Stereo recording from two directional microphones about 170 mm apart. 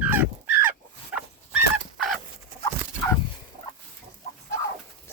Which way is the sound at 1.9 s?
Centre (ahead or behind).